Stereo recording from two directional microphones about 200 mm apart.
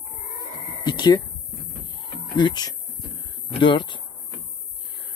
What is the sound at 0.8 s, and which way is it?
Speech, 20° left (ahead or behind).